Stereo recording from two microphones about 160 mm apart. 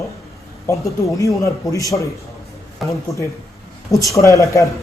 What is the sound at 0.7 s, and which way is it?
A man's voice, 20° left (ahead or behind).